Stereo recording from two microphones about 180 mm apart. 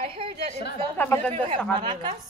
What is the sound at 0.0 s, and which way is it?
Speech, 30° right (ahead or behind).